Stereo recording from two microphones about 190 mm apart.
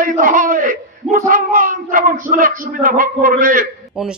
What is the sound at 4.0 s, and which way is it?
Speech, 5° right (ahead or behind).